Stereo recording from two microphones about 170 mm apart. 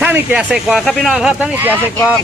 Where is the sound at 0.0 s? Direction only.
10° right (ahead or behind).